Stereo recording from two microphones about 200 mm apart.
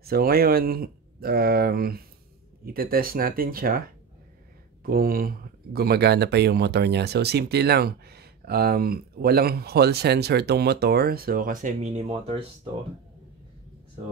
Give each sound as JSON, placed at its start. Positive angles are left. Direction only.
{"t": 0.0, "sound": "speech", "side_deg": -50}
{"t": 4.8, "sound": "speech", "side_deg": -45}